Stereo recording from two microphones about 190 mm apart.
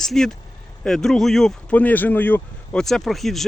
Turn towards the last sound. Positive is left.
turn(degrees=0)  # may be behind; listen again after turning